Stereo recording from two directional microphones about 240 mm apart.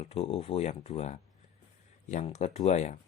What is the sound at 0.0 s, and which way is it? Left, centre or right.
Speech, left.